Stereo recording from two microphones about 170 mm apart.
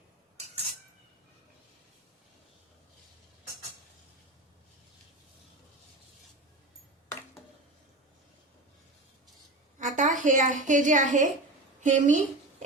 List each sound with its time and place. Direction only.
9.7 s a woman's voice: 50° right (ahead or behind)